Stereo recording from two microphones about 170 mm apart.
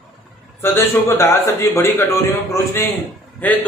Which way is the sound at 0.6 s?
15° left (ahead or behind).